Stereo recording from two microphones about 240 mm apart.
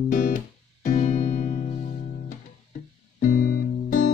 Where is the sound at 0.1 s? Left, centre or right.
Left.